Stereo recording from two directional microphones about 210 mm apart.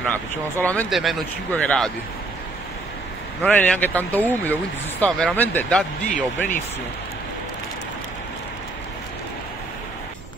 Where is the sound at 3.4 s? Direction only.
5° left (ahead or behind).